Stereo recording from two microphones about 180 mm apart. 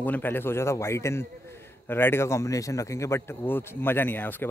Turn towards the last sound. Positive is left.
turn(degrees=10)  # may be behind; listen again after turning